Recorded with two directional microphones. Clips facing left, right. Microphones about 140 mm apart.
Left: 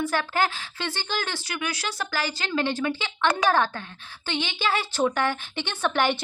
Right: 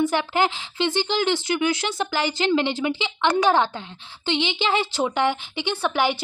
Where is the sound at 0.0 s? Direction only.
20° right (ahead or behind).